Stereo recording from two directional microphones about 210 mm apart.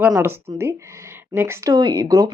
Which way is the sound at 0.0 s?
10° right (ahead or behind).